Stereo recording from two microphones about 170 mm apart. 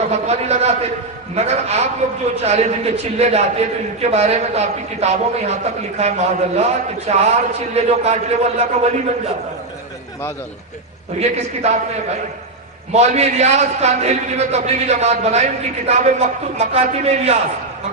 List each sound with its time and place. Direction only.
0.1 s a man's voice: 40° right (ahead or behind)
11.2 s a man's voice: 40° right (ahead or behind)
12.9 s a man's voice: 40° right (ahead or behind)